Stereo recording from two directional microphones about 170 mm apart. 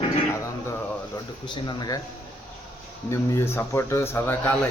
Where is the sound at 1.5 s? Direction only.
25° left (ahead or behind).